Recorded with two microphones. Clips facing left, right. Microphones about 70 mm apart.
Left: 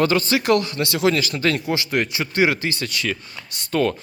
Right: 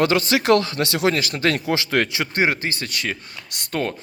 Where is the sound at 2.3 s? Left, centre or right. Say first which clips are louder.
Left 2 dB; right.